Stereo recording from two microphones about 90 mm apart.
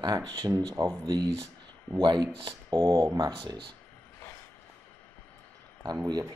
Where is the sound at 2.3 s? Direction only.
70° right (ahead or behind).